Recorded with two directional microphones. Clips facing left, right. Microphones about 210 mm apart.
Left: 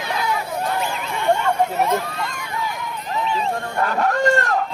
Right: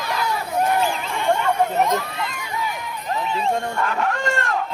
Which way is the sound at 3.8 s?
40° left (ahead or behind).